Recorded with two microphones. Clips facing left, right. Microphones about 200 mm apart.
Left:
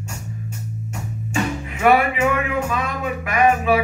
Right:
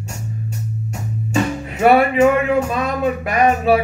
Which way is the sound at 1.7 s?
40° right (ahead or behind).